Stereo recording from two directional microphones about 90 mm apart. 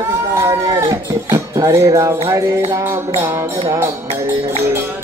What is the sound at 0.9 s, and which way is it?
Music, 40° right (ahead or behind).